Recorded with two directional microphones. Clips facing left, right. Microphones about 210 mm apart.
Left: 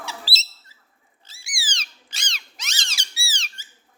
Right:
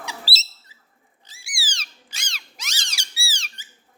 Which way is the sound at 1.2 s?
10° right (ahead or behind).